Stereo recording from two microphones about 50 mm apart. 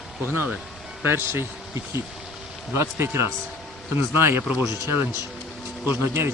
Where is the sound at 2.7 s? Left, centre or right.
Right.